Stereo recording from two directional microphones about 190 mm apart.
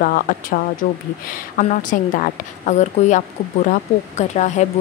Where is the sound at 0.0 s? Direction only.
50° left (ahead or behind).